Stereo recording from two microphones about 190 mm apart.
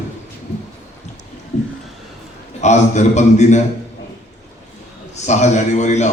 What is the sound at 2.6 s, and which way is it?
Speech, 40° left (ahead or behind).